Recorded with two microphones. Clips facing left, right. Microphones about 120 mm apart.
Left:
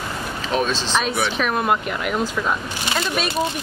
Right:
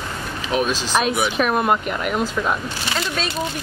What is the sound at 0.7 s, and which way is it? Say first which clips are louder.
Speech: right 2 dB; 10° right (ahead or behind).